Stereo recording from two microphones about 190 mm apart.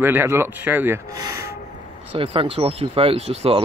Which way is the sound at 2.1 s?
30° right (ahead or behind).